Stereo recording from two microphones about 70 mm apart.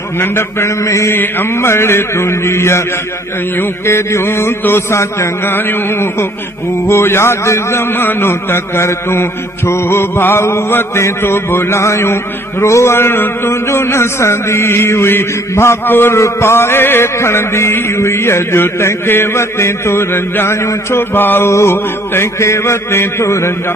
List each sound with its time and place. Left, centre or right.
0.2 s a man's voice: left
1.1 s a man's voice: left
21.5 s a man's voice: left